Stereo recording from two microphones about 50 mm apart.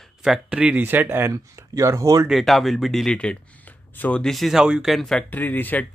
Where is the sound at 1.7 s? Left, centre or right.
Right.